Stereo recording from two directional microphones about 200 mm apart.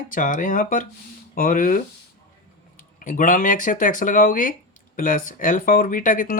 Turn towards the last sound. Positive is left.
turn(degrees=40)  # may be behind; listen again after turning